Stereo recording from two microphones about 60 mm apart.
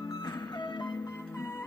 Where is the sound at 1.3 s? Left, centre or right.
Left.